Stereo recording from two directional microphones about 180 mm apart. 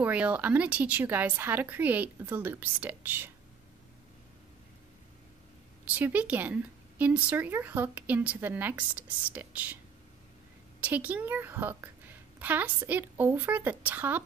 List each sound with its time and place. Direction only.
0.0 s speech: 10° right (ahead or behind)
5.9 s speech: 10° right (ahead or behind)
10.8 s speech: 10° right (ahead or behind)